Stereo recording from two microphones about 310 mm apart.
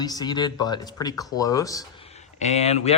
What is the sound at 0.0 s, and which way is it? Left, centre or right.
Speech, centre.